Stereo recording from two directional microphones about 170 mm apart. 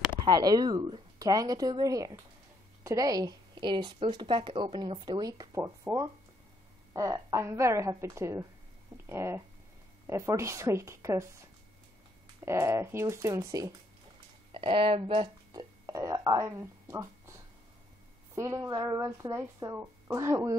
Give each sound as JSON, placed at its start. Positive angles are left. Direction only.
{"t": 0.2, "sound": "a woman's voice", "side_deg": -25}
{"t": 12.4, "sound": "speech", "side_deg": -15}
{"t": 14.5, "sound": "speech", "side_deg": -30}